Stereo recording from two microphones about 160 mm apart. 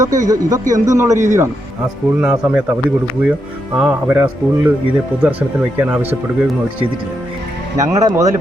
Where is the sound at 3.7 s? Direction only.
5° right (ahead or behind).